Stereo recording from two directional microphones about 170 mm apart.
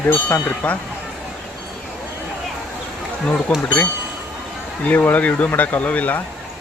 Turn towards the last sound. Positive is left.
turn(degrees=10)  # may be behind; listen again after turning